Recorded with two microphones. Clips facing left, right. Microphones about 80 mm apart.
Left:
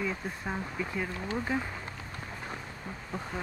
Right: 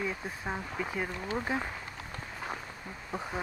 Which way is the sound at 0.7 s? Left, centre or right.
Right.